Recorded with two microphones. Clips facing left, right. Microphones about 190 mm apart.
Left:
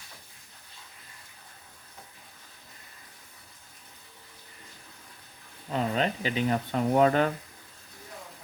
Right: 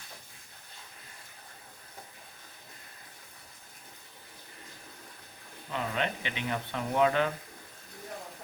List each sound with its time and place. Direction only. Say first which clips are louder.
5.7 s speech: left 5 dB; 35° left (ahead or behind)